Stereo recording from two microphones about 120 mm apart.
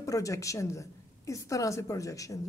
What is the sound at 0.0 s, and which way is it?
A woman's voice, 25° left (ahead or behind).